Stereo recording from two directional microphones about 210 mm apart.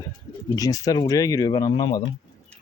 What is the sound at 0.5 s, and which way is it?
Speech, 15° left (ahead or behind).